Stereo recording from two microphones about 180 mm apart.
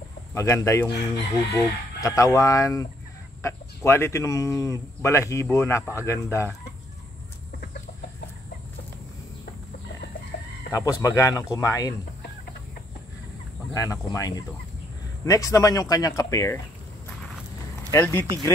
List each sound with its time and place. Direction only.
0.3 s speech: 15° left (ahead or behind)
10.3 s chicken: 65° left (ahead or behind)
10.7 s speech: 20° left (ahead or behind)
13.7 s speech: 20° left (ahead or behind)
17.9 s speech: 10° left (ahead or behind)